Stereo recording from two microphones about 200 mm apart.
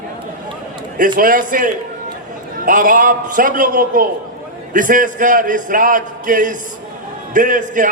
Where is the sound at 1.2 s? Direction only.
45° right (ahead or behind).